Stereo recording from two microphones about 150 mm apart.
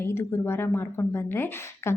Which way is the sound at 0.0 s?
15° left (ahead or behind).